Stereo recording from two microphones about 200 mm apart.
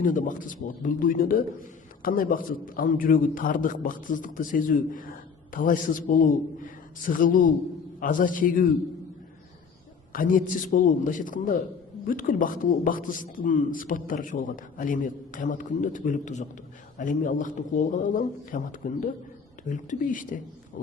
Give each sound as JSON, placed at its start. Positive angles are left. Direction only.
{"t": 0.0, "sound": "a man's voice", "side_deg": 40}
{"t": 10.1, "sound": "a man's voice", "side_deg": 45}